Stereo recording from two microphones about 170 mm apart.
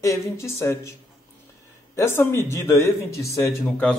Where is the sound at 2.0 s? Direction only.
15° left (ahead or behind).